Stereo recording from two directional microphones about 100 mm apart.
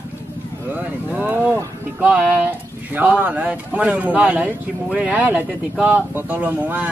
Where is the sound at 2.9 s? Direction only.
20° right (ahead or behind).